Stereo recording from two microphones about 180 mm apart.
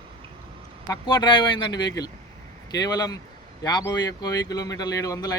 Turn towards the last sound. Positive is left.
turn(degrees=20)  # may be behind; listen again after turning